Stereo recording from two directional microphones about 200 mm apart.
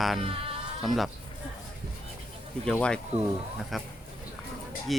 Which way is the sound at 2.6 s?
5° left (ahead or behind).